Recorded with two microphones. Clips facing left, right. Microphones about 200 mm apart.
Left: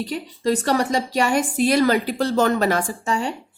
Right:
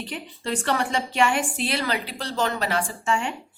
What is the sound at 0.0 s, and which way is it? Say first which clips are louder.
Speech: left 9 dB; 40° left (ahead or behind).